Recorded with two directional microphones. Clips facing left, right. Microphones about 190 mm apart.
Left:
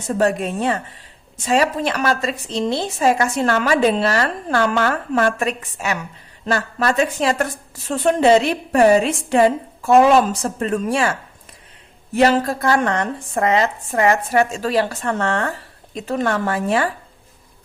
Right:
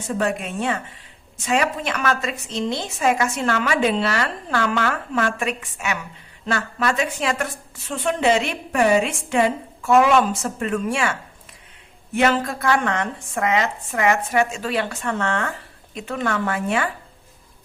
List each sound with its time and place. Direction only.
0.2 s a woman's voice: 40° left (ahead or behind)